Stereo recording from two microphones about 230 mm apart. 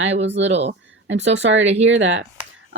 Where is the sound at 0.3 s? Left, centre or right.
Right.